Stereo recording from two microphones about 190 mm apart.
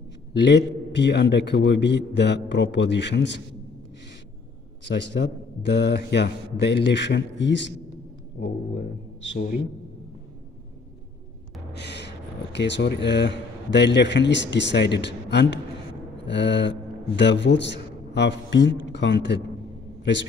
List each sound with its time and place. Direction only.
0.3 s a man's voice: 65° left (ahead or behind)
4.8 s a man's voice: 65° left (ahead or behind)
11.7 s a sound: 60° left (ahead or behind)
12.5 s a man's voice: 65° left (ahead or behind)